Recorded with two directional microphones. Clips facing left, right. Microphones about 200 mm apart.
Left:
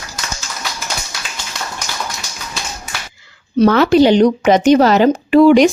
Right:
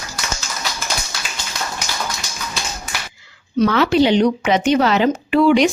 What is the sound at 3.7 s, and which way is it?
Speech, 45° left (ahead or behind).